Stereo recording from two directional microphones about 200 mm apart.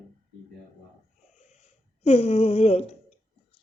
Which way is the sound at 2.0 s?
30° left (ahead or behind).